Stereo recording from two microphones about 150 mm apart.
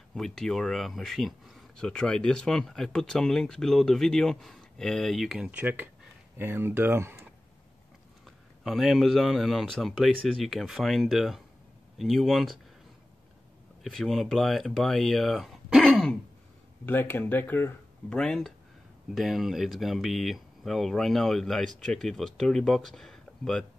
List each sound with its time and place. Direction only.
0.1 s speech: centre (ahead or behind)
5.6 s speech: 10° right (ahead or behind)
8.6 s speech: centre (ahead or behind)
13.8 s speech: centre (ahead or behind)
16.8 s speech: 15° left (ahead or behind)